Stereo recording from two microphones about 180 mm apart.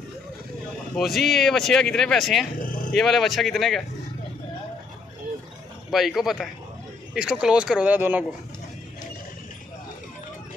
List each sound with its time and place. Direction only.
0.9 s speech: centre (ahead or behind)
2.6 s a sound: 50° left (ahead or behind)
3.0 s speech: centre (ahead or behind)
5.9 s speech: centre (ahead or behind)